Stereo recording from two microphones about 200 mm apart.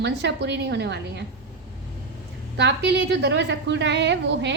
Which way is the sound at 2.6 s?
60° right (ahead or behind).